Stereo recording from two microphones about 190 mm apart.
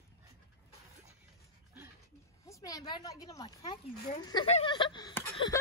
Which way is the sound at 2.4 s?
15° left (ahead or behind).